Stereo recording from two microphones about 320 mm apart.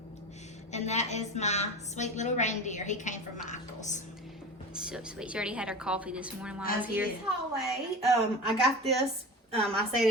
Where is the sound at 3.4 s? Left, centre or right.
Left.